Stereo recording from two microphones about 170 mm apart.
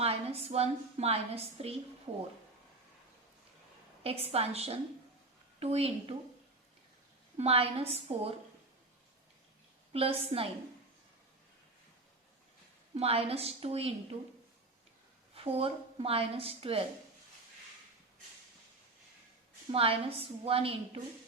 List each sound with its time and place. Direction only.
0.0 s a woman's voice: 35° right (ahead or behind)
4.0 s a woman's voice: 35° right (ahead or behind)
7.3 s a woman's voice: 35° right (ahead or behind)
9.9 s a woman's voice: 35° right (ahead or behind)
12.9 s a woman's voice: 35° right (ahead or behind)
15.4 s a woman's voice: 35° right (ahead or behind)
19.7 s a woman's voice: 35° right (ahead or behind)